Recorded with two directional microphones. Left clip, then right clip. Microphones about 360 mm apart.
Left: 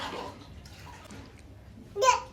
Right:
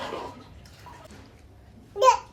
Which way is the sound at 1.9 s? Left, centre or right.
Right.